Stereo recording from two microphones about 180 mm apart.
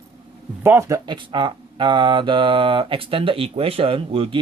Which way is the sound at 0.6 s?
15° right (ahead or behind).